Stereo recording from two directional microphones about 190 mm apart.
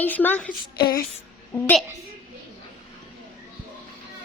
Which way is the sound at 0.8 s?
20° left (ahead or behind).